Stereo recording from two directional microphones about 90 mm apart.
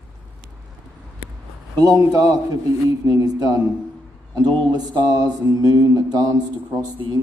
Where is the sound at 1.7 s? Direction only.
45° right (ahead or behind).